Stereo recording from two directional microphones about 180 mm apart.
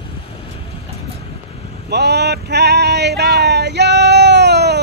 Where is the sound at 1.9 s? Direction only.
65° right (ahead or behind).